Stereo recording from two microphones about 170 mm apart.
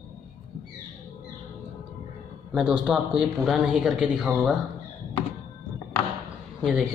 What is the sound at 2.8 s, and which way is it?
Speech, 5° right (ahead or behind).